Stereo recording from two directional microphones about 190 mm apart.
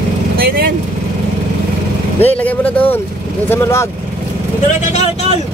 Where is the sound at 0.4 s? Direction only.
55° right (ahead or behind).